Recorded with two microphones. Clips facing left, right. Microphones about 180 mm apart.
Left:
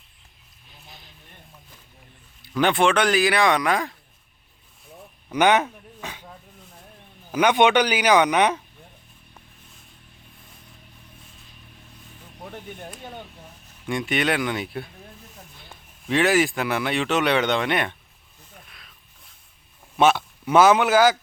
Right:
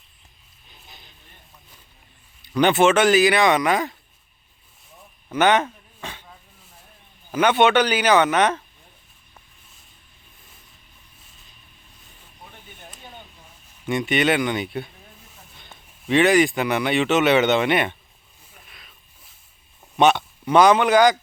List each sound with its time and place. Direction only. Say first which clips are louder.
0.9 s music: left 2 dB; centre (ahead or behind)
2.4 s speech: right 3 dB; centre (ahead or behind)
5.3 s dog: even; 10° left (ahead or behind)
7.3 s speech: right 1 dB; 10° left (ahead or behind)
12.4 s music: left 9 dB; 65° left (ahead or behind)
13.8 s speech: right 3 dB; centre (ahead or behind)
18.7 s a sound: right 1 dB; centre (ahead or behind)
20.0 s speech: right 1 dB; centre (ahead or behind)